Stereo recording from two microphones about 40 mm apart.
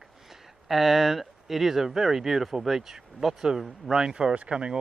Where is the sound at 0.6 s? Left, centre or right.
Centre.